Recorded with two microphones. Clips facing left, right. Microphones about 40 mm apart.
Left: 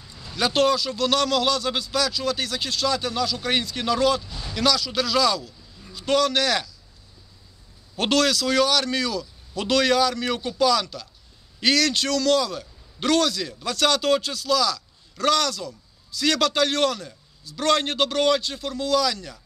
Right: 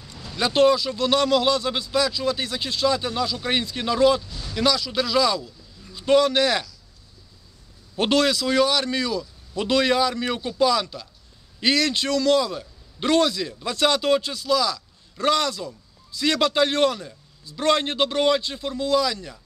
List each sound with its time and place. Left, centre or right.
0.3 s a man's voice: centre
4.2 s speech: centre
4.6 s a man's voice: centre
7.9 s a man's voice: centre